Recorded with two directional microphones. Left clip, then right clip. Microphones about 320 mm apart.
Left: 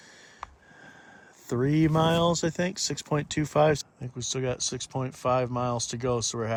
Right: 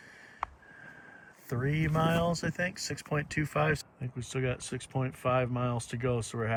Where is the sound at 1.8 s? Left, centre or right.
Left.